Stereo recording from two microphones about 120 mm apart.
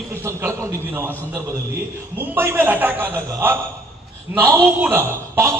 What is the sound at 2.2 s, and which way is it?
A man's voice, 20° right (ahead or behind).